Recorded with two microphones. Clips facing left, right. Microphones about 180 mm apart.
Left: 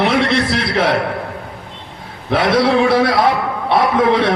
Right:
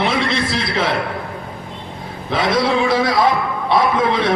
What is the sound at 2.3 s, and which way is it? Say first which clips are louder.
A man's voice: left 3 dB; 65° left (ahead or behind).